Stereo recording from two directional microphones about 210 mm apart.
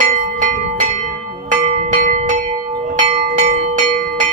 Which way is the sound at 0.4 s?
40° right (ahead or behind).